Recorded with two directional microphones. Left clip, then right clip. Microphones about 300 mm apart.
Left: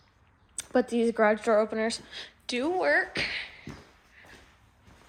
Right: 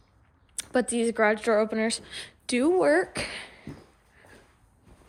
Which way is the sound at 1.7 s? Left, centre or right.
Right.